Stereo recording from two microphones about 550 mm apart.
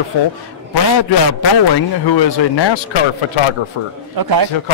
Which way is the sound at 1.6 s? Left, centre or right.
Left.